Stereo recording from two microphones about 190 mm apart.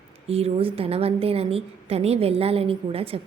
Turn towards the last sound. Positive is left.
turn(degrees=-30)  # may be behind; listen again after turning